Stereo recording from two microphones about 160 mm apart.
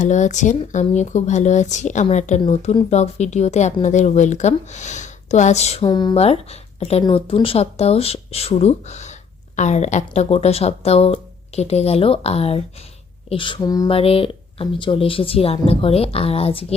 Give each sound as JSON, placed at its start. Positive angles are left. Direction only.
{"t": 0.0, "sound": "speech", "side_deg": 50}
{"t": 5.8, "sound": "speech", "side_deg": 25}
{"t": 6.1, "sound": "speech", "side_deg": 40}
{"t": 13.9, "sound": "speech", "side_deg": 35}